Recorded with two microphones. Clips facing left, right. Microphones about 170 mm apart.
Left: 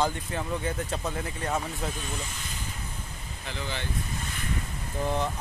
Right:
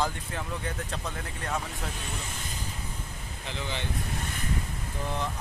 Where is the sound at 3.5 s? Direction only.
20° right (ahead or behind).